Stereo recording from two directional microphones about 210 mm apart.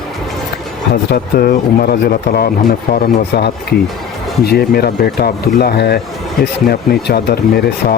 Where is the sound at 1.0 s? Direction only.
50° left (ahead or behind).